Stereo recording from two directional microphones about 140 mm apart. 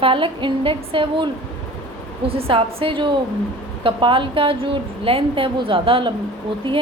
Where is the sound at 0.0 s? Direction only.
40° right (ahead or behind).